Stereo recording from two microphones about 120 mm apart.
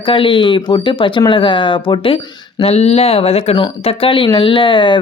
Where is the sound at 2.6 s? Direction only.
60° left (ahead or behind).